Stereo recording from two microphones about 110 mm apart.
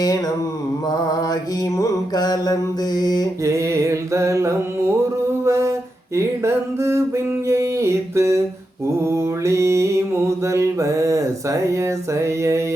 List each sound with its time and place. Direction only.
0.9 s mantra: 35° left (ahead or behind)
3.4 s a sound: 25° right (ahead or behind)
9.0 s mantra: 25° right (ahead or behind)